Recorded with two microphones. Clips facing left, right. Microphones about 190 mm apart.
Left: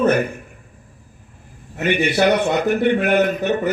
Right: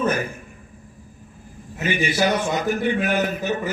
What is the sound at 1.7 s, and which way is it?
A man's voice, 65° left (ahead or behind).